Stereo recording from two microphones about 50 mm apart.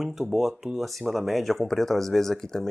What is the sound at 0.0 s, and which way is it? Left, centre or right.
Speech, centre.